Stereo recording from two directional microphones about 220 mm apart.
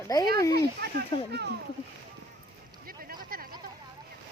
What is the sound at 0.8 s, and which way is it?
Children playing, 50° right (ahead or behind).